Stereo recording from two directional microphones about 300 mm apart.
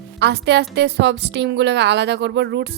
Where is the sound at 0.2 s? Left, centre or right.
Right.